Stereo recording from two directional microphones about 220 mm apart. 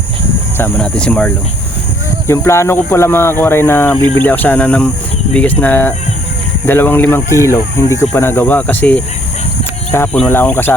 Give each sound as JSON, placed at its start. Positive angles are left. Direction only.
{"t": 0.5, "sound": "speech", "side_deg": 5}